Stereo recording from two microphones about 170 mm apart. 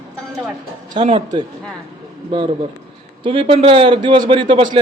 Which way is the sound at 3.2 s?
30° right (ahead or behind).